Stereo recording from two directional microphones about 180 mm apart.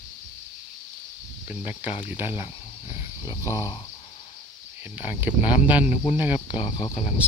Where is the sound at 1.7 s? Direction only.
10° right (ahead or behind).